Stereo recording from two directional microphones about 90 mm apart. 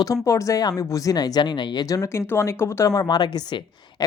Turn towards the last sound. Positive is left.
turn(degrees=55)  # may be behind; listen again after turning